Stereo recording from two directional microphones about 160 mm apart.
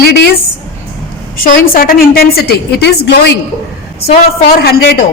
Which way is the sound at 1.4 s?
65° left (ahead or behind).